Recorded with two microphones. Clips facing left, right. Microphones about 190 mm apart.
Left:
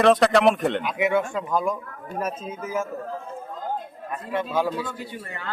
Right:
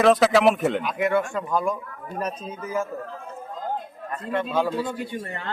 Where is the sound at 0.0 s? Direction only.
Centre (ahead or behind).